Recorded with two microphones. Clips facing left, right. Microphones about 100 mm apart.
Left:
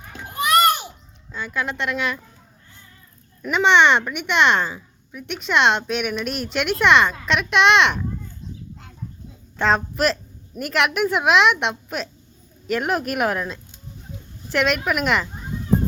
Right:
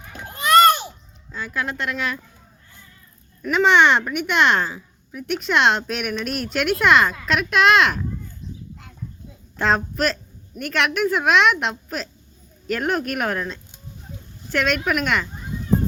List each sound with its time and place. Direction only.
0.3 s children playing: 15° left (ahead or behind)
1.3 s speech: centre (ahead or behind)
3.4 s speech: centre (ahead or behind)
9.6 s speech: centre (ahead or behind)